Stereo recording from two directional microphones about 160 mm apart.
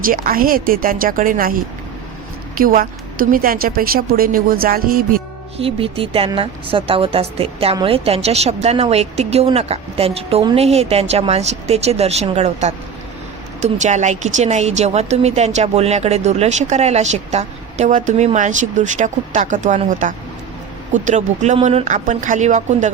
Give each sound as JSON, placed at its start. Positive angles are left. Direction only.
{"t": 0.0, "sound": "a woman's voice", "side_deg": -65}
{"t": 2.6, "sound": "a woman's voice", "side_deg": -60}
{"t": 5.5, "sound": "a woman's voice", "side_deg": -35}